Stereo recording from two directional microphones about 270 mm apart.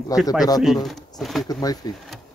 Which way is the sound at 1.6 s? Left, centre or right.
Centre.